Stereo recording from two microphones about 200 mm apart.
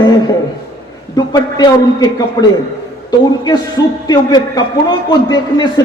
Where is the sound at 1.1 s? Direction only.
20° left (ahead or behind).